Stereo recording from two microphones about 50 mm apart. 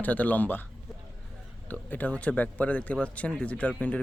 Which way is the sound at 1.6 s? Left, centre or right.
Left.